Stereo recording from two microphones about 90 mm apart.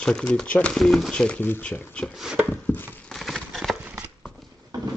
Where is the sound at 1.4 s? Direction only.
20° left (ahead or behind).